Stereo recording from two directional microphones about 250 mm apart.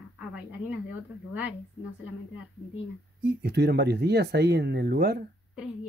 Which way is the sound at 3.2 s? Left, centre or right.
Right.